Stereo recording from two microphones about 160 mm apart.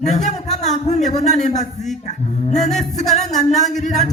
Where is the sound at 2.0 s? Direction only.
45° left (ahead or behind).